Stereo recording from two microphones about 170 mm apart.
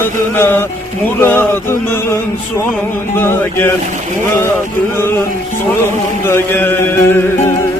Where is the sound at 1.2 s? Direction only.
10° left (ahead or behind).